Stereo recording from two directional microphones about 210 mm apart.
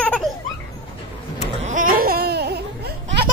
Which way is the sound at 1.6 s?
40° right (ahead or behind).